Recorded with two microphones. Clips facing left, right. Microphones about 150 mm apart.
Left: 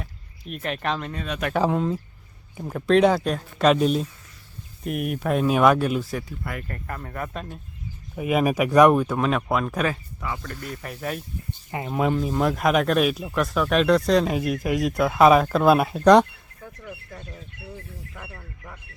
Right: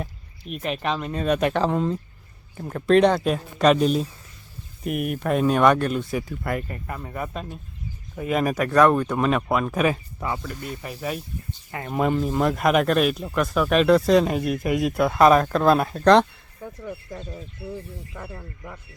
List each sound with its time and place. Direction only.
0.4 s speech: centre (ahead or behind)
1.1 s speech: 40° right (ahead or behind)
1.5 s speech: 5° left (ahead or behind)
6.7 s speech: 10° right (ahead or behind)
8.1 s speech: 10° left (ahead or behind)
9.0 s speech: centre (ahead or behind)
9.9 s speech: 30° right (ahead or behind)
10.4 s speech: 5° right (ahead or behind)
11.9 s speech: centre (ahead or behind)